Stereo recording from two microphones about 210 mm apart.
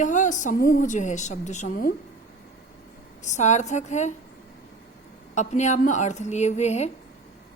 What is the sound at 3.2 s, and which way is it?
Speech, 35° left (ahead or behind).